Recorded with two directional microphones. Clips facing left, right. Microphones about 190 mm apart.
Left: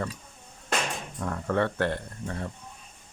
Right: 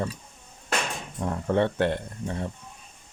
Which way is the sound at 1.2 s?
20° right (ahead or behind).